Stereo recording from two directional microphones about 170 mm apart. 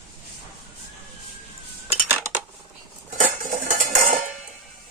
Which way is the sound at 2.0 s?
10° right (ahead or behind).